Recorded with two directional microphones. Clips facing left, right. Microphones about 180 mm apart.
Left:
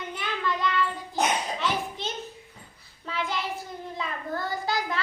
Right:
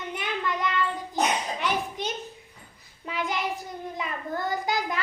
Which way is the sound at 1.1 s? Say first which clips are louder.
Even; 15° right (ahead or behind).